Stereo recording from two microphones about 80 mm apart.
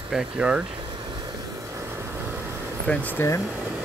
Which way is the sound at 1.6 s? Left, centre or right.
Right.